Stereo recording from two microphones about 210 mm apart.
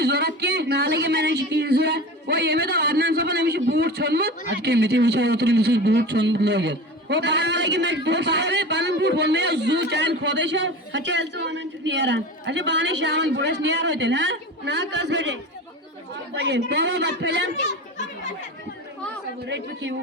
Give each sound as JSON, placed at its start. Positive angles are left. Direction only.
{"t": 0.0, "sound": "speech", "side_deg": -50}
{"t": 19.5, "sound": "speech", "side_deg": -55}